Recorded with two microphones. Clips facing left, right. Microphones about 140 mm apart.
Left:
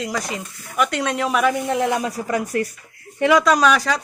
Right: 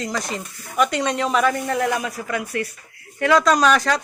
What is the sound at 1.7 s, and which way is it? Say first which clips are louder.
Speech: left 1 dB; 20° left (ahead or behind).